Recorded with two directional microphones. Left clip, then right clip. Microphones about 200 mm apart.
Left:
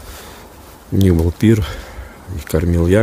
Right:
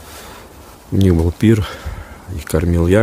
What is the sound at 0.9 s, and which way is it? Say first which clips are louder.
Speech: even; centre (ahead or behind).